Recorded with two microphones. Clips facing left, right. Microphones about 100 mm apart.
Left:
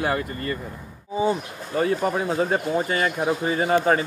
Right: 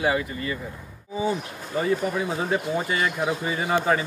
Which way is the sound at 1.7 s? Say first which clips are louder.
Left 2 dB; 55° left (ahead or behind).